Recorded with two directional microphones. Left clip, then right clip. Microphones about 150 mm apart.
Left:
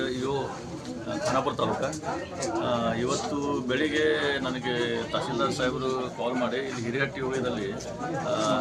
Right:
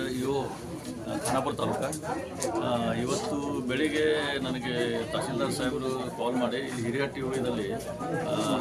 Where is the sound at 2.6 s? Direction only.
Centre (ahead or behind).